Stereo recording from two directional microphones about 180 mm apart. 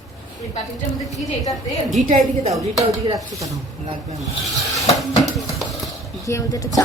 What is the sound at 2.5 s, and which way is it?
Speech, 20° right (ahead or behind).